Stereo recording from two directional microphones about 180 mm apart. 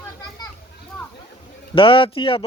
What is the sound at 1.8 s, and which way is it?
Speech, 30° left (ahead or behind).